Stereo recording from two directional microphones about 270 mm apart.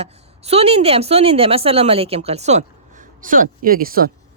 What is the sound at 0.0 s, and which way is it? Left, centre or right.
A woman's voice, right.